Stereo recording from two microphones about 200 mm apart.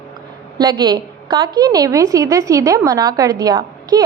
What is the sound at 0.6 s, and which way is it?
A woman's voice, 25° right (ahead or behind).